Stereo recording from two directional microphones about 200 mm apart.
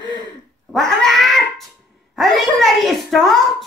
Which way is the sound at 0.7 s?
Centre (ahead or behind).